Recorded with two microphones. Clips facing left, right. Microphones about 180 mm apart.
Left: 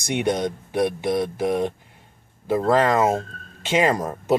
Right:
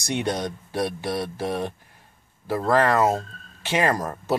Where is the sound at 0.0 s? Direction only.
20° left (ahead or behind).